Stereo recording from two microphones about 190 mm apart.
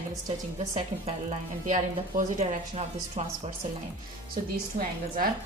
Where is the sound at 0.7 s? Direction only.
35° right (ahead or behind).